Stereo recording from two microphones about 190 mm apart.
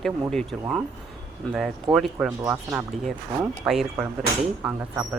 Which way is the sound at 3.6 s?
Centre (ahead or behind).